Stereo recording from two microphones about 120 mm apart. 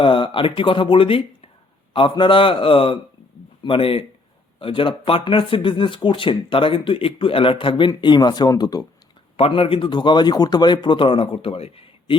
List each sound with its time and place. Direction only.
0.0 s speech: 45° left (ahead or behind)
9.4 s speech: 50° left (ahead or behind)